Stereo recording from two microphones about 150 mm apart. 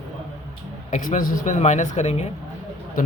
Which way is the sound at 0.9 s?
60° left (ahead or behind).